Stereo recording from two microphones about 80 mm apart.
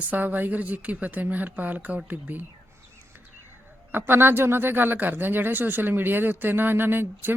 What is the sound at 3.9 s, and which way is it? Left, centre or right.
Speech, right.